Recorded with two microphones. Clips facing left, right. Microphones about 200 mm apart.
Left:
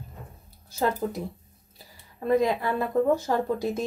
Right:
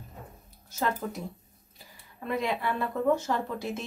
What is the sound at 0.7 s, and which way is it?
Speech, 30° left (ahead or behind).